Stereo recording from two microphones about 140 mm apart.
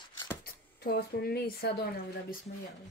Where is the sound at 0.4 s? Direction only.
90° left.